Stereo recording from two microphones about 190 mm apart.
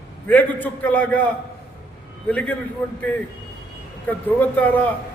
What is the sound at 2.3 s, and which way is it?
Speech, 5° left (ahead or behind).